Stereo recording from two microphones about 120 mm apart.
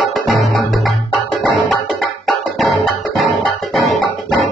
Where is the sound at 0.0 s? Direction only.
Centre (ahead or behind).